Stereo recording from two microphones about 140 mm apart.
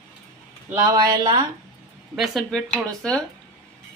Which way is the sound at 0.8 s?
30° right (ahead or behind).